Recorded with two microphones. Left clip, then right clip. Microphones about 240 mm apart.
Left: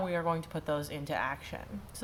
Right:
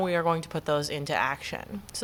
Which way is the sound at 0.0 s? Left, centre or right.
Right.